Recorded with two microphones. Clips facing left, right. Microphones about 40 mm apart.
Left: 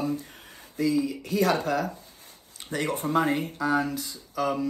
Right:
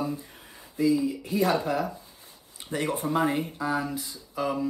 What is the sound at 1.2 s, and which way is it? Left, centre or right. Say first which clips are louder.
Speech: left 1 dB; right.